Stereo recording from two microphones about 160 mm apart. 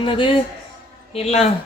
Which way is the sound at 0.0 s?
35° left (ahead or behind).